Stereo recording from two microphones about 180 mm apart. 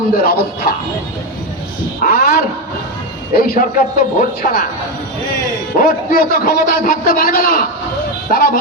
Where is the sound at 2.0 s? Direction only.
55° left (ahead or behind).